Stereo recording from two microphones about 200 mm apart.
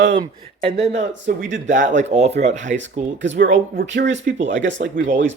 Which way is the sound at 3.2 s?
65° right (ahead or behind).